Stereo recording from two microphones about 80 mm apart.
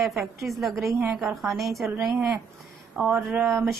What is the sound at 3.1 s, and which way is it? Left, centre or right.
Speech, right.